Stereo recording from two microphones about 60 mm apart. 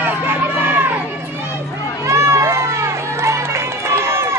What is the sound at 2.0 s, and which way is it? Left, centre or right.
Run, right.